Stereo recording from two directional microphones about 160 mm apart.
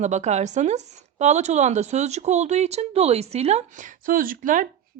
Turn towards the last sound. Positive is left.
turn(degrees=-55)  # may be behind; listen again after turning